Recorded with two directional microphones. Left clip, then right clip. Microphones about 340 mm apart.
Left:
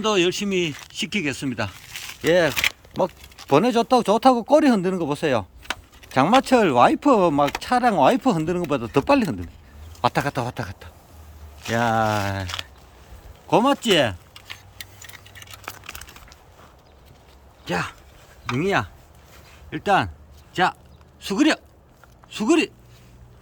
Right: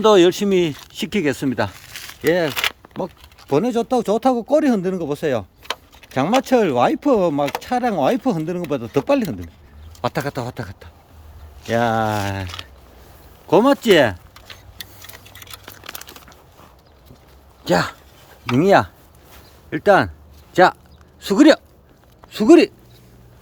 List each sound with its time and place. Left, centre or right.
0.0 s speech: centre
3.5 s speech: centre
15.8 s a sound: centre
17.7 s speech: centre